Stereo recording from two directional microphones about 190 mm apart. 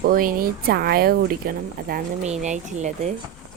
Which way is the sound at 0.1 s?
45° right (ahead or behind).